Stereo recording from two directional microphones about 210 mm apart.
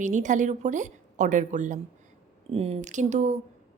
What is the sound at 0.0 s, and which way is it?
A woman's voice, 35° right (ahead or behind).